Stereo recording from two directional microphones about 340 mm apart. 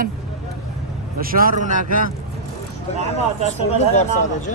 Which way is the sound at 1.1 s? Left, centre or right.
Right.